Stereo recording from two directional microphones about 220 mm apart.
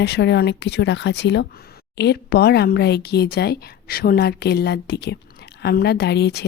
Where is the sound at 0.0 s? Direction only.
50° left (ahead or behind).